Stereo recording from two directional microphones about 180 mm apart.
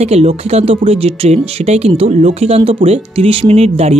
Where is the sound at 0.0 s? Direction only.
35° right (ahead or behind).